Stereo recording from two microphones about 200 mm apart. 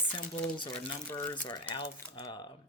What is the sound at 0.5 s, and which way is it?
Speech, 25° left (ahead or behind).